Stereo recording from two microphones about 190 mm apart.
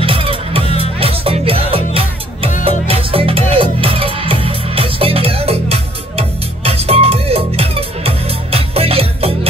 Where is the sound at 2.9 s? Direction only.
30° right (ahead or behind).